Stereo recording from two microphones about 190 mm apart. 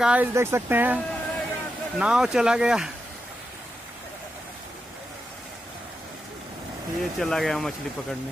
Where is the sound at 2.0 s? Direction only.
5° right (ahead or behind).